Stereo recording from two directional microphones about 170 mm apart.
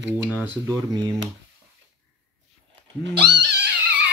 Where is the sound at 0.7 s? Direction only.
25° right (ahead or behind).